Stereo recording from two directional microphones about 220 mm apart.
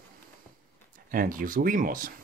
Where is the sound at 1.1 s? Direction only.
40° right (ahead or behind).